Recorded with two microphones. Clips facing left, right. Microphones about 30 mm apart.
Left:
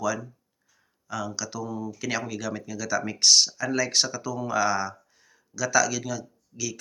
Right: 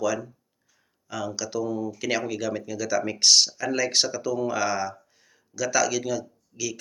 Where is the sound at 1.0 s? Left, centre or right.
Right.